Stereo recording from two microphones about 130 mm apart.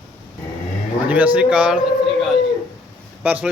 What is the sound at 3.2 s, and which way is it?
Speech, 15° right (ahead or behind).